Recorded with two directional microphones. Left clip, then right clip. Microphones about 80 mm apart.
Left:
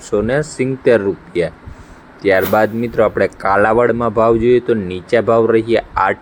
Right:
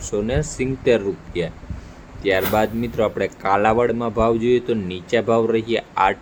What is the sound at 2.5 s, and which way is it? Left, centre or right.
Speech, centre.